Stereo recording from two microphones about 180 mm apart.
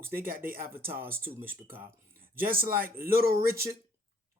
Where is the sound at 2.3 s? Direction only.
55° right (ahead or behind).